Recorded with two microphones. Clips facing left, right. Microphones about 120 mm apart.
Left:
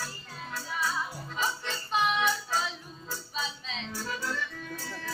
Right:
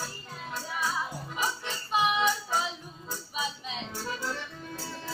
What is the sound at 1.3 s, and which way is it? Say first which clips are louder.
Music: left 1 dB; 10° right (ahead or behind).